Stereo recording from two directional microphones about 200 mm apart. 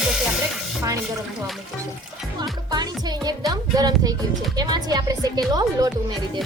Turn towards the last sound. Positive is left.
turn(degrees=-20)  # may be behind; listen again after turning